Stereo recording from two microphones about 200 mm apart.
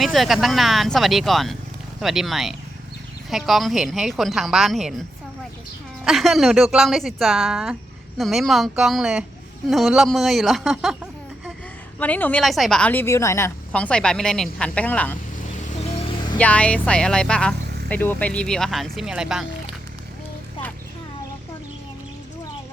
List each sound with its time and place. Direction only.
0.0 s speech: centre (ahead or behind)
6.1 s speech: centre (ahead or behind)
11.9 s a woman's voice: 5° left (ahead or behind)
15.6 s vehicle: 30° left (ahead or behind)
16.4 s speech: 5° left (ahead or behind)